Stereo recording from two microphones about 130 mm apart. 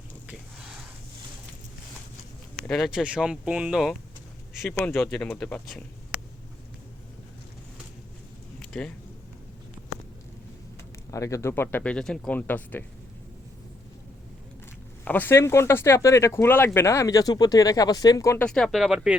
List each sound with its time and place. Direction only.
0.3 s a sound: 5° right (ahead or behind)
2.6 s speech: centre (ahead or behind)
4.7 s speech: 15° left (ahead or behind)
8.5 s a sound: 10° left (ahead or behind)
11.1 s speech: 25° left (ahead or behind)
15.0 s speech: 15° left (ahead or behind)
18.3 s speech: 5° left (ahead or behind)